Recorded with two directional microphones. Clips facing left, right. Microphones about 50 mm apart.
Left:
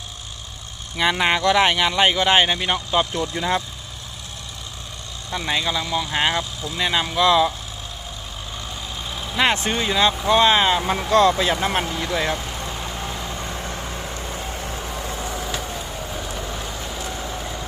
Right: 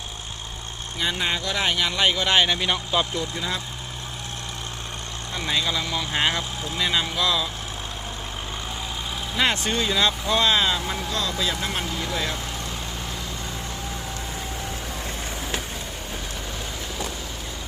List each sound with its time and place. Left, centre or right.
1.1 s speech: left; by 3.1 s centre
3.2 s speech: left
5.5 s speech: left
5.9 s speech: centre
7.2 s speech: left
9.4 s speech: left
11.2 s speech: left